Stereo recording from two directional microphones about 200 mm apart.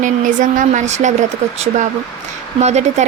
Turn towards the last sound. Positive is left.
turn(degrees=-35)  # may be behind; listen again after turning